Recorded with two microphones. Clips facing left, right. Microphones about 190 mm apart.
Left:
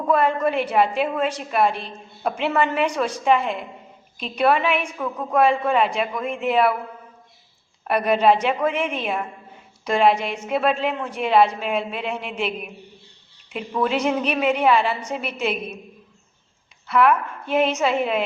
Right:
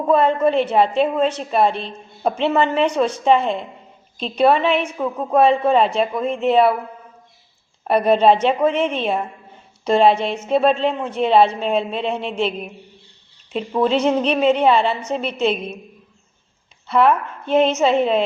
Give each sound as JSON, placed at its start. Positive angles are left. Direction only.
{"t": 0.1, "sound": "a woman's voice", "side_deg": -25}
{"t": 7.9, "sound": "a woman's voice", "side_deg": -30}
{"t": 16.8, "sound": "a woman's voice", "side_deg": -25}